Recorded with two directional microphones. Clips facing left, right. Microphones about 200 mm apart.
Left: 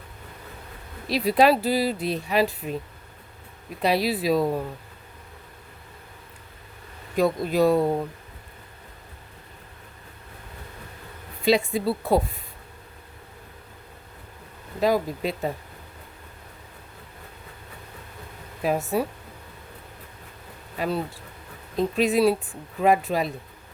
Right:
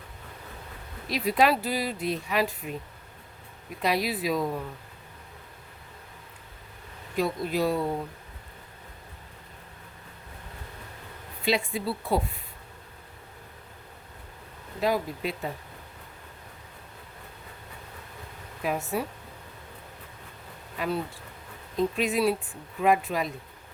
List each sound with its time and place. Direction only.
1.0 s speech: 35° left (ahead or behind)
3.8 s speech: 30° left (ahead or behind)
7.2 s speech: 45° left (ahead or behind)
11.4 s speech: 40° left (ahead or behind)
14.8 s speech: 40° left (ahead or behind)
18.6 s speech: 35° left (ahead or behind)
20.7 s speech: 35° left (ahead or behind)